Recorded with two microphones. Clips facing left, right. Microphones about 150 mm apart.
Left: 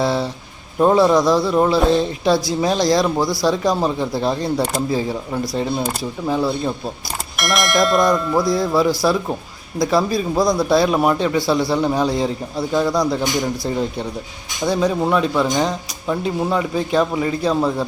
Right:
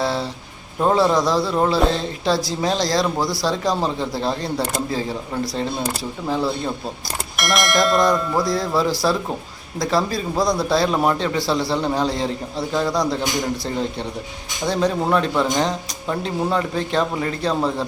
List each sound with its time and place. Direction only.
0.0 s speech: 15° left (ahead or behind)
6.2 s speech: 10° left (ahead or behind)
7.3 s speech: centre (ahead or behind)
8.4 s speech: 15° left (ahead or behind)
14.7 s speech: 5° left (ahead or behind)